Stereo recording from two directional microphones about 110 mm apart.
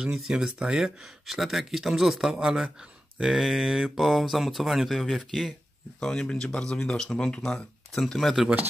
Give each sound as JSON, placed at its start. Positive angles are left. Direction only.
{"t": 0.0, "sound": "speech", "side_deg": -5}